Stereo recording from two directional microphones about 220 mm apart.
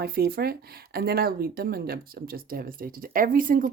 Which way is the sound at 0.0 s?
45° right (ahead or behind).